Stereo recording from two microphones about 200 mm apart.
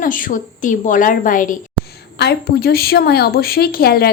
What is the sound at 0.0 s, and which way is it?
A woman's voice, 40° left (ahead or behind).